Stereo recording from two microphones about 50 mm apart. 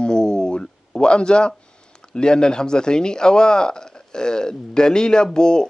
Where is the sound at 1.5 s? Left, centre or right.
Centre.